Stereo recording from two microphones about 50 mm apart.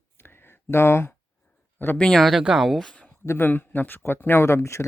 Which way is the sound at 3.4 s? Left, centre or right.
Left.